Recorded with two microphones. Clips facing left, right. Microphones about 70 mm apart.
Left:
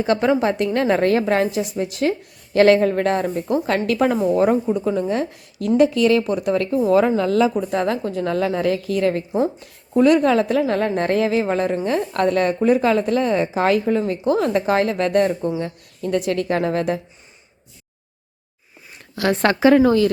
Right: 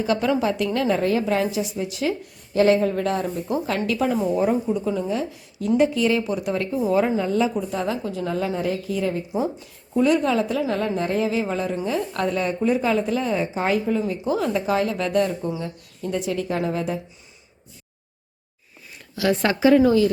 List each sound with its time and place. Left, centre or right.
0.0 s a woman's voice: left
6.9 s a woman's voice: left
7.5 s a woman's voice: left
9.6 s a woman's voice: left
19.1 s a woman's voice: left